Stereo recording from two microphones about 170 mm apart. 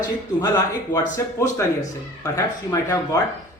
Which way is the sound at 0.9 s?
15° left (ahead or behind).